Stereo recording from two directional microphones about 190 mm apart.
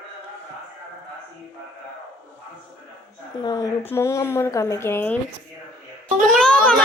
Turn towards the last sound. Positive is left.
turn(degrees=5)  # may be behind; listen again after turning